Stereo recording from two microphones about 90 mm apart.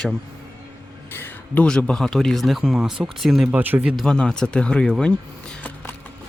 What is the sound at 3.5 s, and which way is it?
Speech, 20° right (ahead or behind).